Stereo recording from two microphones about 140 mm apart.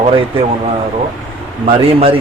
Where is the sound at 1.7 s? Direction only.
40° right (ahead or behind).